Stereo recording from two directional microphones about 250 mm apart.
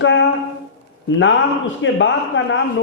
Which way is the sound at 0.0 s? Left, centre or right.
Left.